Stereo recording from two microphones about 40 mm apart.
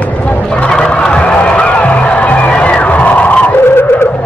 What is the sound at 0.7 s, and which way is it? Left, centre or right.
Music, left.